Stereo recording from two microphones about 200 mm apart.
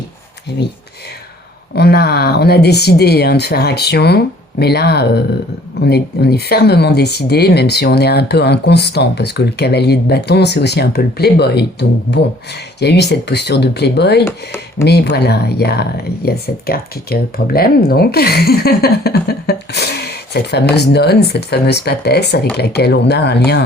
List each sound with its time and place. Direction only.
1.7 s speech: 55° left (ahead or behind)
14.3 s speech: 10° left (ahead or behind)
14.8 s speech: 55° left (ahead or behind)